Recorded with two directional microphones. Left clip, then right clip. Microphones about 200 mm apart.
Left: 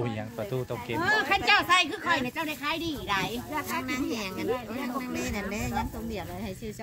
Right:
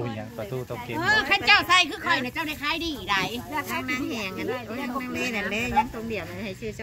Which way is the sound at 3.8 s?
50° left (ahead or behind).